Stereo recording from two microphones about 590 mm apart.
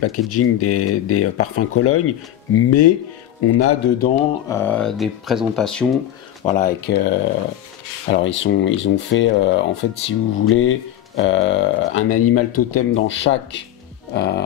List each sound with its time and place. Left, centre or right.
0.0 s speech: left; by 5.9 s centre
6.4 s speech: centre